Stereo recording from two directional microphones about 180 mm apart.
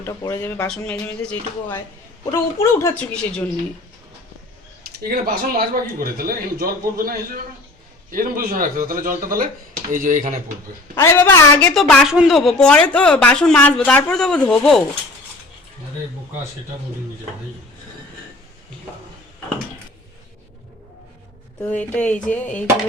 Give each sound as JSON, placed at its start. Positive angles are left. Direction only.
{"t": 0.0, "sound": "speech", "side_deg": 15}
{"t": 5.0, "sound": "speech", "side_deg": -50}
{"t": 10.9, "sound": "speech", "side_deg": 10}
{"t": 11.7, "sound": "speech", "side_deg": 0}
{"t": 21.6, "sound": "speech", "side_deg": 10}